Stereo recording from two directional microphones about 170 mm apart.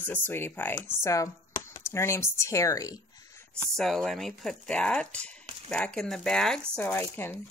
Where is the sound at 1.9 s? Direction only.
15° left (ahead or behind).